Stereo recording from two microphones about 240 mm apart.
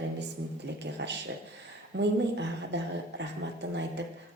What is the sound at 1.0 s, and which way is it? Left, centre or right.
Speech, right.